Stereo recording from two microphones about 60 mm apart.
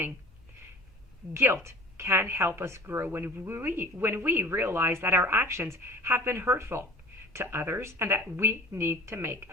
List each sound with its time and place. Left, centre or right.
1.3 s a woman's voice: right